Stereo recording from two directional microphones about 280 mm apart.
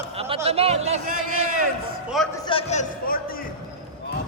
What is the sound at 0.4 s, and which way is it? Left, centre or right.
Speech, right.